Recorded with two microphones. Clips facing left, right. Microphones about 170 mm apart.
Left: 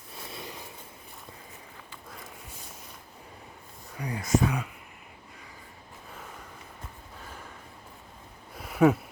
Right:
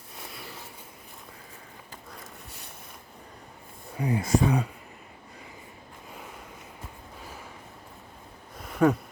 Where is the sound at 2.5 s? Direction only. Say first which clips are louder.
Even; 70° right (ahead or behind).